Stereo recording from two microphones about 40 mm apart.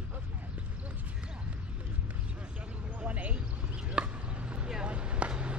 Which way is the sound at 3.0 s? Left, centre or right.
Right.